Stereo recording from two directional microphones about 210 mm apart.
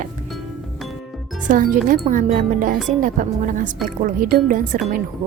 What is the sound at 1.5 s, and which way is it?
Speech, 40° right (ahead or behind).